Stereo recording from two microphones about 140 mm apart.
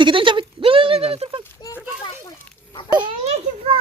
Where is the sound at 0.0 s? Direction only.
35° right (ahead or behind).